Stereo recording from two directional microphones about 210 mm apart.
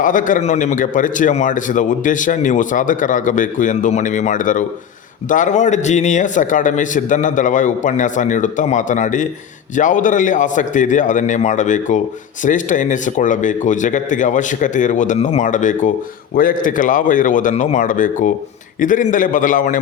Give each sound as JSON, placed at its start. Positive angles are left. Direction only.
{"t": 0.0, "sound": "a man's voice", "side_deg": 40}